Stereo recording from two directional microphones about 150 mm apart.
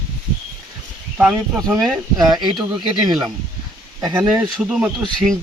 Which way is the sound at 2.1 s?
30° right (ahead or behind).